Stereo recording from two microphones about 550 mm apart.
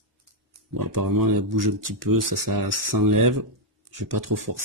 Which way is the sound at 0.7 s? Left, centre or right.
Right.